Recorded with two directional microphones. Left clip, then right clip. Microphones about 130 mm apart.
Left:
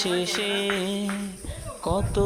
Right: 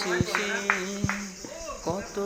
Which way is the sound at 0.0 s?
45° left (ahead or behind).